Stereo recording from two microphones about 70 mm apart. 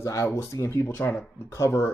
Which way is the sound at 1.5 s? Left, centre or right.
Left.